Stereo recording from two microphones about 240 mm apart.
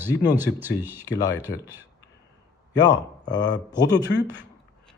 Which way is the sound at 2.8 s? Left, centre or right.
Centre.